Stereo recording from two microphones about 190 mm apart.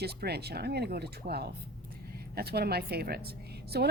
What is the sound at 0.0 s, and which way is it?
Speech, 55° right (ahead or behind).